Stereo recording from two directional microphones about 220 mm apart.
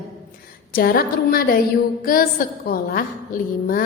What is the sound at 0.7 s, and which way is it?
A woman's voice, 40° left (ahead or behind).